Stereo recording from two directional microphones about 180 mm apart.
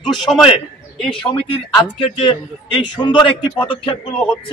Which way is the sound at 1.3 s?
30° left (ahead or behind).